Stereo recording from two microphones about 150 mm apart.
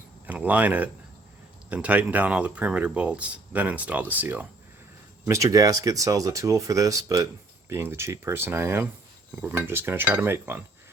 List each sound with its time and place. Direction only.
0.3 s speech: 10° right (ahead or behind)